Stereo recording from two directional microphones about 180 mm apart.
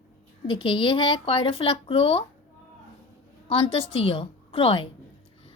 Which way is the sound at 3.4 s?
35° left (ahead or behind).